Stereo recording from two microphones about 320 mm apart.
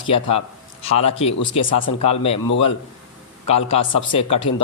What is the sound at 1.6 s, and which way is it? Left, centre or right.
Speech, left.